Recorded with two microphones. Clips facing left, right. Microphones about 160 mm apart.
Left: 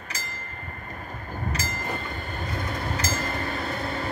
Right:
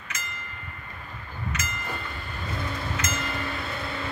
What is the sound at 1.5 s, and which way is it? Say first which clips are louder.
Train: left 2 dB; 35° left (ahead or behind).